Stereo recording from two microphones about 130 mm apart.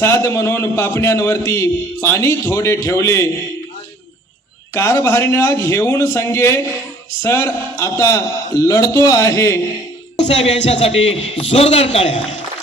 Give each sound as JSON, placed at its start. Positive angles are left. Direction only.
{"t": 0.0, "sound": "a man's voice", "side_deg": 20}
{"t": 4.7, "sound": "a man's voice", "side_deg": 20}
{"t": 10.2, "sound": "a man's voice", "side_deg": 50}